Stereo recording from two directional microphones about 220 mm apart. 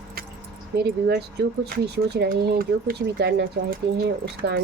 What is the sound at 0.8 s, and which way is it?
Speech, 45° right (ahead or behind).